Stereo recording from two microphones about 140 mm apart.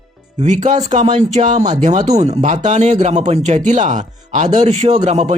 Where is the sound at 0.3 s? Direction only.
55° right (ahead or behind).